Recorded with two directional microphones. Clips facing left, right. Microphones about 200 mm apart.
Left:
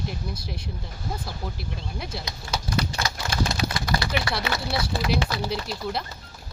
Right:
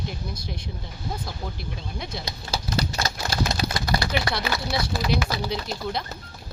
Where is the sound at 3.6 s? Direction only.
35° right (ahead or behind).